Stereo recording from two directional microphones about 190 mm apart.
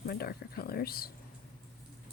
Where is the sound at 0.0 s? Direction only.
55° left (ahead or behind).